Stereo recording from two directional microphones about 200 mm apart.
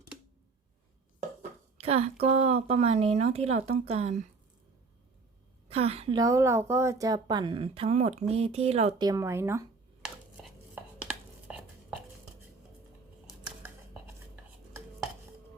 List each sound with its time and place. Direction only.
1.4 s a woman's voice: 30° right (ahead or behind)
5.6 s a woman's voice: 30° right (ahead or behind)
9.0 s speech: 15° right (ahead or behind)
11.0 s a sound: 5° right (ahead or behind)